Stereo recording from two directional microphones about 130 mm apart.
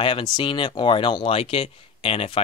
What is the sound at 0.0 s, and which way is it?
Speech, 40° left (ahead or behind).